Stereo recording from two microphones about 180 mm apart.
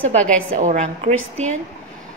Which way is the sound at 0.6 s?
40° right (ahead or behind).